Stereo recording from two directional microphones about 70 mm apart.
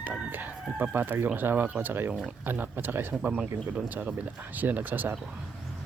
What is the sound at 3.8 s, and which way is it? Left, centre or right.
Speech, right.